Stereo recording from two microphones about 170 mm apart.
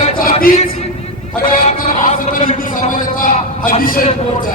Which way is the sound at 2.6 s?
50° left (ahead or behind).